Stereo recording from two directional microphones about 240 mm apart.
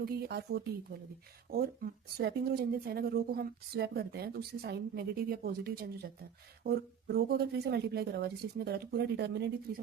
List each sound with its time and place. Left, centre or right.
0.0 s speech: right